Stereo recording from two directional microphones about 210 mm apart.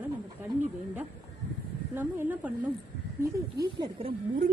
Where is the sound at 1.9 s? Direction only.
10° right (ahead or behind).